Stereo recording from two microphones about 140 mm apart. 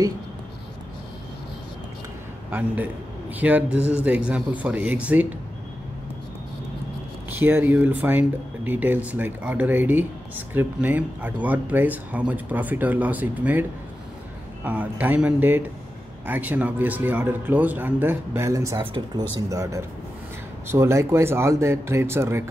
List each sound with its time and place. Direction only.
2.5 s speech: 15° right (ahead or behind)
7.2 s speech: 15° right (ahead or behind)